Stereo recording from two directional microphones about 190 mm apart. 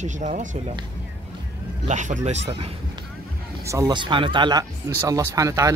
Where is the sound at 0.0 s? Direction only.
40° right (ahead or behind).